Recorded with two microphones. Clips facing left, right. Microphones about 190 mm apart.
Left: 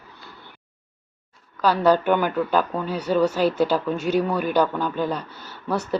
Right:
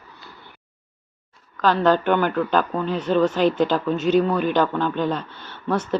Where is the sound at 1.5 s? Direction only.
10° left (ahead or behind).